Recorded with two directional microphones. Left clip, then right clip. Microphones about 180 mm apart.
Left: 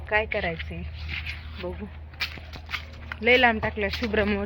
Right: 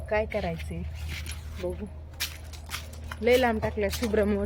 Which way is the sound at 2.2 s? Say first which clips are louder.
Left 3 dB; centre (ahead or behind).